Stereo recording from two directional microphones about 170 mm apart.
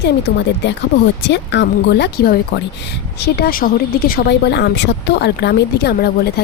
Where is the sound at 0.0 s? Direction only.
85° left.